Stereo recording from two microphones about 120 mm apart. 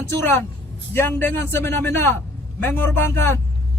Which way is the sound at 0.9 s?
20° left (ahead or behind).